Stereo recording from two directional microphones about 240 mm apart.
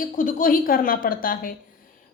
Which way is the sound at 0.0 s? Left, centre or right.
Left.